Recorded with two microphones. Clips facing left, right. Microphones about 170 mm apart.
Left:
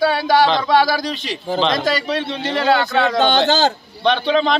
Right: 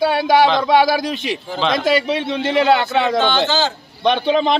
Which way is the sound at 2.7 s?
20° right (ahead or behind).